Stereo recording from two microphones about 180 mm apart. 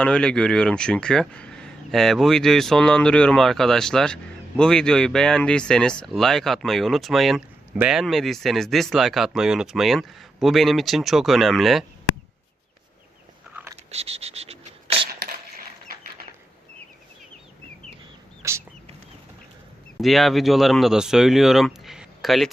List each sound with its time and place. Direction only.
0.0 s speech: 5° left (ahead or behind)
13.5 s biting: 10° right (ahead or behind)
13.9 s a sound: 35° right (ahead or behind)
18.4 s chicken: 15° right (ahead or behind)
20.0 s speech: centre (ahead or behind)